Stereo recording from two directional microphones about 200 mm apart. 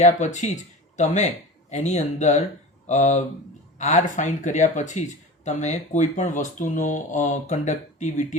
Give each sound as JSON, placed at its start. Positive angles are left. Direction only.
{"t": 0.0, "sound": "speech", "side_deg": 35}